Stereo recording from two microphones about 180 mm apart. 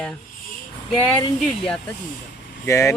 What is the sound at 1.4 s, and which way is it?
Speech, 5° left (ahead or behind).